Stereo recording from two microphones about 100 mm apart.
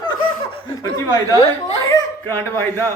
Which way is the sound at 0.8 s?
35° left (ahead or behind).